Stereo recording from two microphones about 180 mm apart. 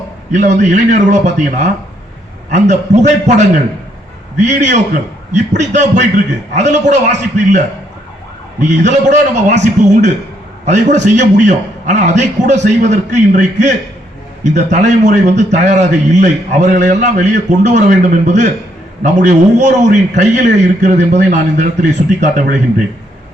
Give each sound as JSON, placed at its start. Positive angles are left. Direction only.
{"t": 0.3, "sound": "a man's voice", "side_deg": -40}
{"t": 8.6, "sound": "a man's voice", "side_deg": -40}